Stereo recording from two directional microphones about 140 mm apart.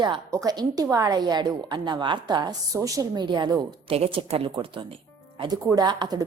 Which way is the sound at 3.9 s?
45° right (ahead or behind).